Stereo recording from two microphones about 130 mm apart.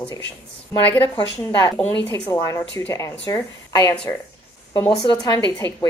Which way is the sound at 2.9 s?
25° left (ahead or behind).